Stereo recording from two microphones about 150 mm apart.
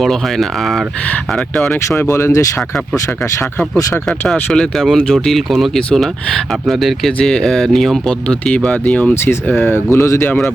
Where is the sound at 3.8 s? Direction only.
20° left (ahead or behind).